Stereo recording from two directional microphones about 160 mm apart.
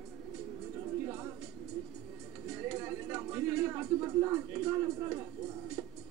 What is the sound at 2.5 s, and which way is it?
Music, 10° right (ahead or behind).